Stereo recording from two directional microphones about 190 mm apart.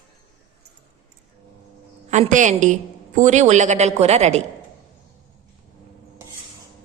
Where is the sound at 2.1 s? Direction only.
40° right (ahead or behind).